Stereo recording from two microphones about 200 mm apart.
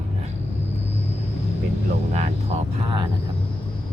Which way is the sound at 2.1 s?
35° right (ahead or behind).